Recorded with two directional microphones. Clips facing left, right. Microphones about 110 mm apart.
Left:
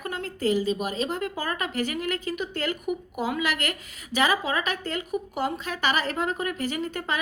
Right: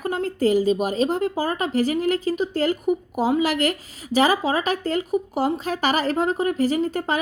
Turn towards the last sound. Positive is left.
turn(degrees=-40)  # may be behind; listen again after turning